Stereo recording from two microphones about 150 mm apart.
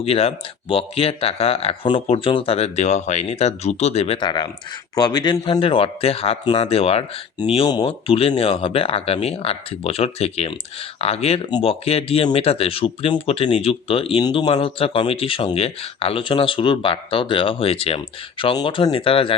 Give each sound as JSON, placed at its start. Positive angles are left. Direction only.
{"t": 0.0, "sound": "speech", "side_deg": 40}
{"t": 4.2, "sound": "speech", "side_deg": 30}